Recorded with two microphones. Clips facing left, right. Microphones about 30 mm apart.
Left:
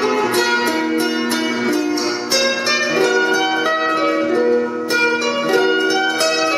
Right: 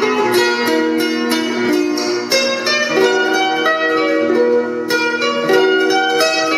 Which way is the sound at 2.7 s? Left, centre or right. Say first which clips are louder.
Right 3 dB; centre.